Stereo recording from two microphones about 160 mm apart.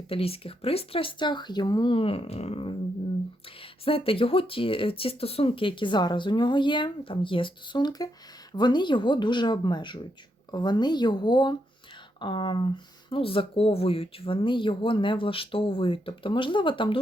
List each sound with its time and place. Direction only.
0.1 s speech: 35° left (ahead or behind)